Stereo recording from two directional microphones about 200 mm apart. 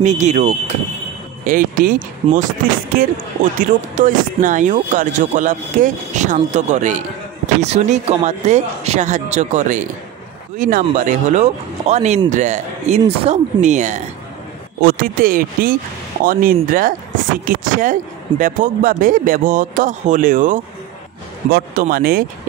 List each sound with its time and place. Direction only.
0.0 s speech: 35° right (ahead or behind)
3.5 s speech: 40° right (ahead or behind)
14.8 s speech: 50° right (ahead or behind)